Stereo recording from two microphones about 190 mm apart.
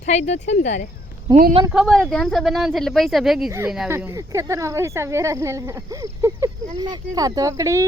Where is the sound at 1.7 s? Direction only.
Centre (ahead or behind).